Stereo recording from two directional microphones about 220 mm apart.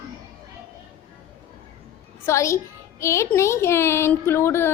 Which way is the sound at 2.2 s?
15° left (ahead or behind).